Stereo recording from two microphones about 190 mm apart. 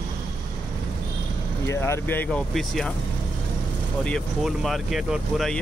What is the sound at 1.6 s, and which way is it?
Speech, 15° left (ahead or behind).